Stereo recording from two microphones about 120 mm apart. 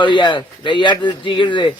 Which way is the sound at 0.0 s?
40° left (ahead or behind).